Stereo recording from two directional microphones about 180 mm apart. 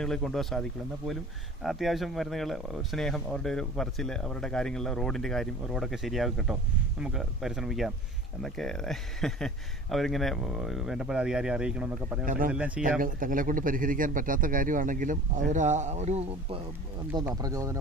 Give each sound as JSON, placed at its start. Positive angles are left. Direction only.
{"t": 0.0, "sound": "speech", "side_deg": 0}
{"t": 12.2, "sound": "a man's voice", "side_deg": -50}
{"t": 12.5, "sound": "speech", "side_deg": -5}
{"t": 13.0, "sound": "a man's voice", "side_deg": -50}
{"t": 17.4, "sound": "speech", "side_deg": -20}